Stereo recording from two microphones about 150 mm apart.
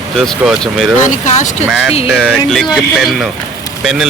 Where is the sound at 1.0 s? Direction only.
50° left (ahead or behind).